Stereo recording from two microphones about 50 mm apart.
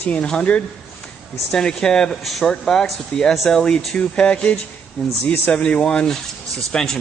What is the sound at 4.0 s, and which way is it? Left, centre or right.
Speech, left.